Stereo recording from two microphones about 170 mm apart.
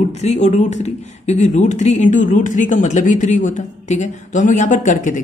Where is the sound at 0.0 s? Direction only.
40° left (ahead or behind).